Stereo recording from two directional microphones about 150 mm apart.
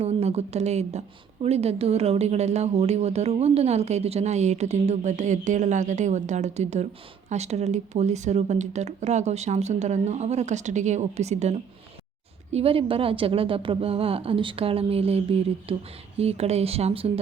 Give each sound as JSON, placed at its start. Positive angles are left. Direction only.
{"t": 0.0, "sound": "a woman's voice", "side_deg": -45}